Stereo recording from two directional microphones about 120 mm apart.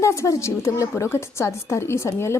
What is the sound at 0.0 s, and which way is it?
Speech, 25° left (ahead or behind).